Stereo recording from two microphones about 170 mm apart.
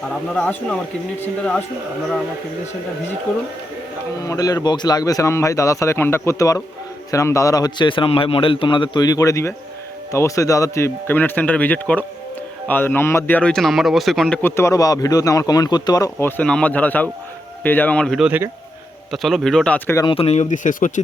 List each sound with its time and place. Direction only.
0.1 s speech: 5° left (ahead or behind)
4.2 s a man's voice: 20° left (ahead or behind); by 14.3 s centre (ahead or behind)
14.4 s a man's voice: 15° left (ahead or behind)
20.0 s speech: 30° left (ahead or behind); by 21.0 s 50° left (ahead or behind)